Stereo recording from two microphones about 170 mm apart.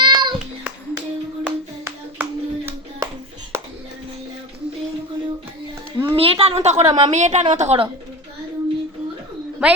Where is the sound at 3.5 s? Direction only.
15° right (ahead or behind).